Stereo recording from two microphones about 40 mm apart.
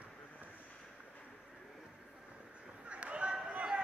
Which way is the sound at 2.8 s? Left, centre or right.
Right.